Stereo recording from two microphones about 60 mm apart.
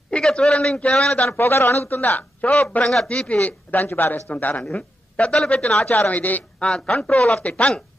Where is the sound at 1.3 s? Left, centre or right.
Left.